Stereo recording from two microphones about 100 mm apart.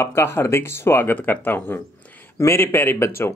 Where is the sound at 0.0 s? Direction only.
25° left (ahead or behind).